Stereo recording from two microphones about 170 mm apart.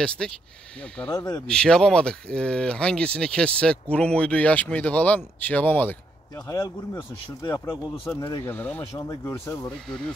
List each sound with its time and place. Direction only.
0.2 s speech: centre (ahead or behind)
1.1 s speech: 20° left (ahead or behind)
1.5 s speech: 5° left (ahead or behind); by 8.1 s 25° left (ahead or behind)
8.5 s speech: 10° left (ahead or behind)
9.8 s speech: 5° left (ahead or behind)